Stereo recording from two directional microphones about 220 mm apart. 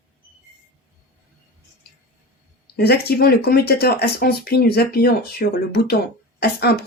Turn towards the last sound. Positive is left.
turn(degrees=45)  # may be behind; listen again after turning